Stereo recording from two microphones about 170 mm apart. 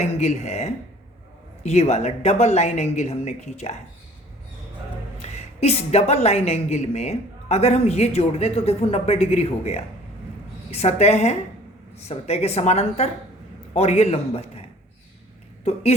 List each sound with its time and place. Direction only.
0.0 s a woman's voice: 40° left (ahead or behind)
5.2 s a woman's voice: 40° left (ahead or behind)
15.6 s a woman's voice: 35° left (ahead or behind)